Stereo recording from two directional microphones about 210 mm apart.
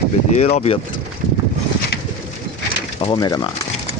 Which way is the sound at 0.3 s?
30° left (ahead or behind).